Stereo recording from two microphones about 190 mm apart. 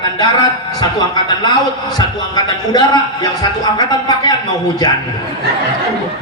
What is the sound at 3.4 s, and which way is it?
Speech, 20° left (ahead or behind).